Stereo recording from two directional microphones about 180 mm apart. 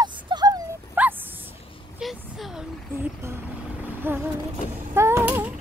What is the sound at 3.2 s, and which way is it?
Vehicle, 15° right (ahead or behind).